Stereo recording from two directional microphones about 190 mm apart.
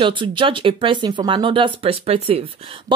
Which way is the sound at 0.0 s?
25° right (ahead or behind).